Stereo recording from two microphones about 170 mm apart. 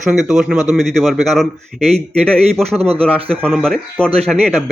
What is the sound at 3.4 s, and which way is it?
A man's voice, centre (ahead or behind).